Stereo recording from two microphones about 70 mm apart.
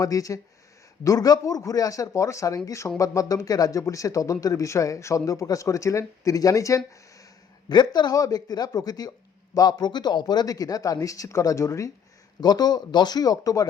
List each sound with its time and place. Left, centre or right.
0.0 s speech: left
7.7 s speech: left
12.4 s speech: left